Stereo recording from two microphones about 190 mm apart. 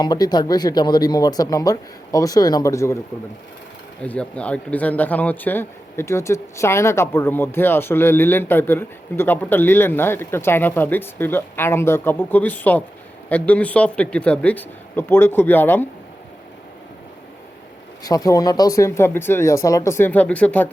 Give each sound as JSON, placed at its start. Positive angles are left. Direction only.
{"t": 0.0, "sound": "speech", "side_deg": 20}
{"t": 4.0, "sound": "speech", "side_deg": 5}
{"t": 18.0, "sound": "speech", "side_deg": 20}